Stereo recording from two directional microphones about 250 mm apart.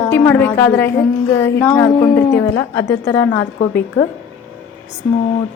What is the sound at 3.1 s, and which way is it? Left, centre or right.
Speech, centre.